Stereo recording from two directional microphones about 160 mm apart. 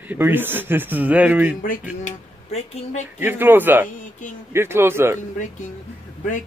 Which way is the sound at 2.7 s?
45° left (ahead or behind).